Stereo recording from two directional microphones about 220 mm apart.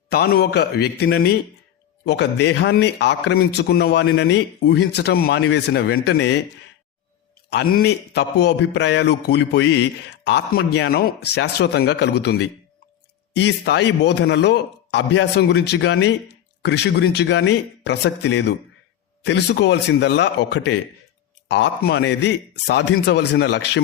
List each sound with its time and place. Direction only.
0.1 s speech: 45° left (ahead or behind)
7.5 s speech: 45° left (ahead or behind)